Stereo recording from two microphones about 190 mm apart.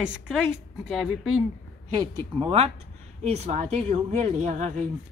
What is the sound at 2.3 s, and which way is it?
Speech, 30° right (ahead or behind).